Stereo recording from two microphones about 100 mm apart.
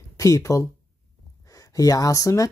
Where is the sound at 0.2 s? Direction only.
35° left (ahead or behind).